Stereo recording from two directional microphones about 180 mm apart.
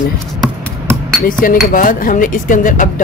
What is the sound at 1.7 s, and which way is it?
Speech, 50° left (ahead or behind).